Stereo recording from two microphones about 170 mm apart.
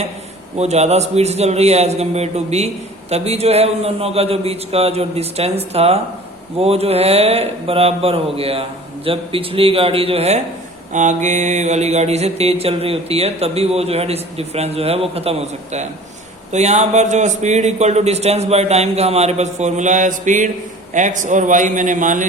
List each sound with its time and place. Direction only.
0.5 s mantra: 40° right (ahead or behind)
20.9 s a man's voice: 45° right (ahead or behind)